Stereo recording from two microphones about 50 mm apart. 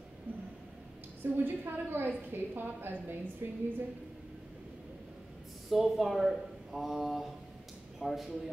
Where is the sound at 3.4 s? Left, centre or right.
Right.